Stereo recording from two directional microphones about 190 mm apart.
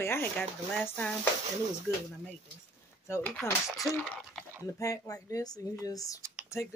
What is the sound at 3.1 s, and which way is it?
Speech, 10° left (ahead or behind).